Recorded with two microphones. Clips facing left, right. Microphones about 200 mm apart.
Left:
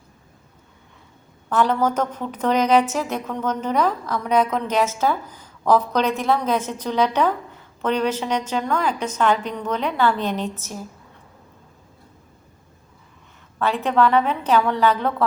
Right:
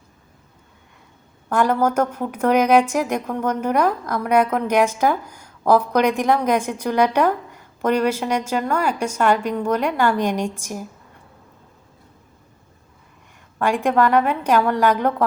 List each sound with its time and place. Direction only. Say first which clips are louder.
1.5 s a woman's voice: right 1 dB; 10° right (ahead or behind)
13.6 s a woman's voice: right 1 dB; 10° right (ahead or behind)